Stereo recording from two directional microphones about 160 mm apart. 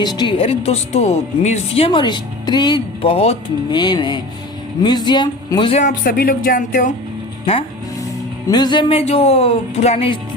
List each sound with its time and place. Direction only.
0.0 s speech: 25° left (ahead or behind)
3.7 s speech: 25° left (ahead or behind)
5.7 s speech: 55° left (ahead or behind)
8.4 s speech: 25° left (ahead or behind)